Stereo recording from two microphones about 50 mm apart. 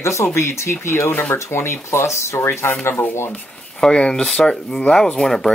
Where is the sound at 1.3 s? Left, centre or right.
Left.